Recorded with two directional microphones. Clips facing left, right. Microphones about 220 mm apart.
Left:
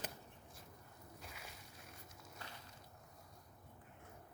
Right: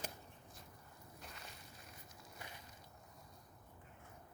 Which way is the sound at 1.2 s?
5° left (ahead or behind).